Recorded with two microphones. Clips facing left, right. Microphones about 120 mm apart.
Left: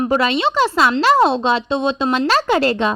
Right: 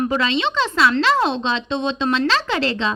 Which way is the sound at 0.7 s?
25° left (ahead or behind).